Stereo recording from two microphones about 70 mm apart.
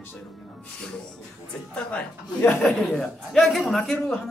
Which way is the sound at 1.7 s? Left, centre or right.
Centre.